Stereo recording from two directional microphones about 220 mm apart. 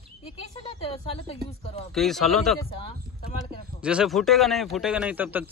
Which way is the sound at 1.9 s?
Centre (ahead or behind).